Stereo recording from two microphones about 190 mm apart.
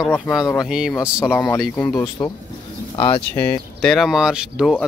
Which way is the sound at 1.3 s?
15° left (ahead or behind).